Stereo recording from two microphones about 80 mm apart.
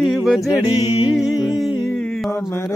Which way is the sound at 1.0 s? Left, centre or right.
Centre.